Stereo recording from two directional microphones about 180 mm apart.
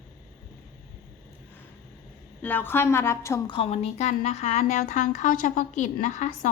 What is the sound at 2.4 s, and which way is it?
A woman's voice, 10° left (ahead or behind).